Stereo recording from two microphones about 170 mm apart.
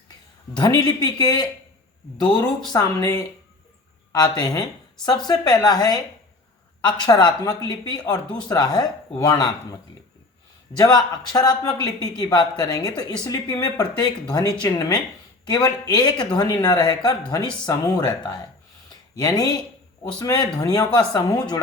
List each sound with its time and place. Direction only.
0.5 s speech: 25° left (ahead or behind)
2.7 s speech: 20° left (ahead or behind)
10.8 s speech: 25° left (ahead or behind)
19.1 s speech: 20° left (ahead or behind)